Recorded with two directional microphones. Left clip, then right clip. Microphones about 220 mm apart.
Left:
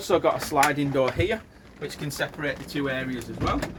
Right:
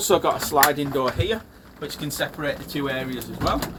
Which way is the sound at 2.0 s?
20° left (ahead or behind).